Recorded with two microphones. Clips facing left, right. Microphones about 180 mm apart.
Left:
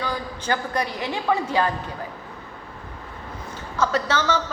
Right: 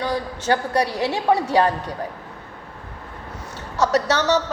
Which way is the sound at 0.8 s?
75° right (ahead or behind).